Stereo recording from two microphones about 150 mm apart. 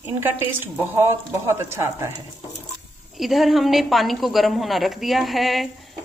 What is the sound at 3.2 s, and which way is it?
A woman's voice, centre (ahead or behind).